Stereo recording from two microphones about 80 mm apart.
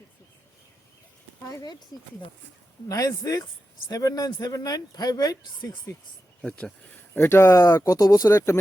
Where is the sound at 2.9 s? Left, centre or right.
Left.